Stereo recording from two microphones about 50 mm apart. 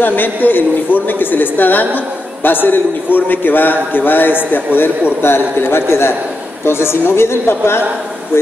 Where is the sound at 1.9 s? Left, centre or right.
Left.